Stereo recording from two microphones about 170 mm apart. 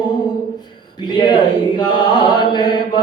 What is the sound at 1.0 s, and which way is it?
A man's voice, 25° left (ahead or behind).